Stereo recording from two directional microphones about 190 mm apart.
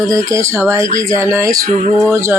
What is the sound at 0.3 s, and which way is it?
Speech, 15° right (ahead or behind).